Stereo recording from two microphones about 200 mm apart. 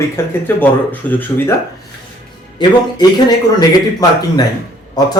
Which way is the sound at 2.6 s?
20° left (ahead or behind).